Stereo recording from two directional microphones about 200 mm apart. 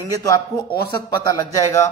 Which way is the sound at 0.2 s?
20° left (ahead or behind).